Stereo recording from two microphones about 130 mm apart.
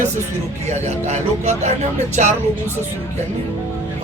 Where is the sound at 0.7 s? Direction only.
60° right (ahead or behind).